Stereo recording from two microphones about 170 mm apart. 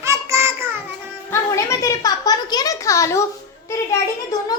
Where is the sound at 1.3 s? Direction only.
15° left (ahead or behind).